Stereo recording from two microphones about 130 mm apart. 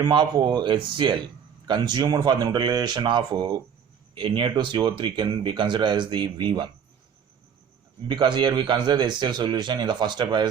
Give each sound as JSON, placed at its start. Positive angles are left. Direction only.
{"t": 0.0, "sound": "speech", "side_deg": -30}
{"t": 8.0, "sound": "speech", "side_deg": -35}